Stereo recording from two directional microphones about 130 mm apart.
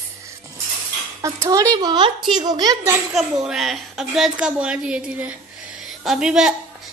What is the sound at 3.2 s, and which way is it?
A woman's voice, 5° right (ahead or behind).